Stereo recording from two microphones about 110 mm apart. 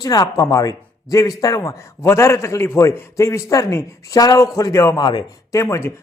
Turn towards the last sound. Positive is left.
turn(degrees=25)  # may be behind; listen again after turning